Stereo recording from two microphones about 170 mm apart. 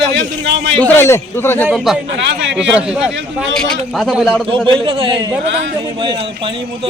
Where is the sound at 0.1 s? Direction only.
90° right.